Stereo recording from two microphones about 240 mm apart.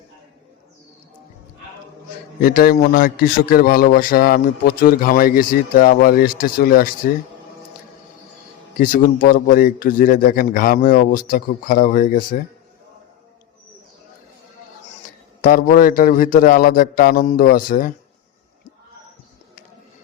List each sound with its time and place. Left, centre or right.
2.4 s a man's voice: left
8.8 s a man's voice: left
15.4 s a man's voice: left